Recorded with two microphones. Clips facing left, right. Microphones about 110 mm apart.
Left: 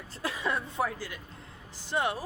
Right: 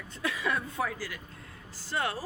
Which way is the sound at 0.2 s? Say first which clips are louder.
Even; 30° left (ahead or behind).